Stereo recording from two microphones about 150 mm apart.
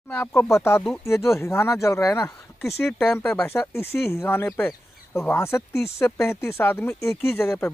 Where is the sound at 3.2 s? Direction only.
15° left (ahead or behind).